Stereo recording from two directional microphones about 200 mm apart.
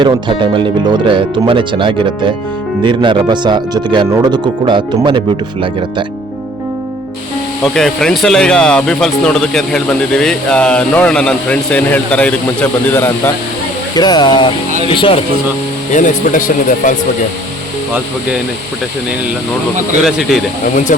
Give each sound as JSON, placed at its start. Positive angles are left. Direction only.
{"t": 0.0, "sound": "speech", "side_deg": -25}
{"t": 7.6, "sound": "speech", "side_deg": 0}
{"t": 15.9, "sound": "speech", "side_deg": 40}
{"t": 20.1, "sound": "speech", "side_deg": 0}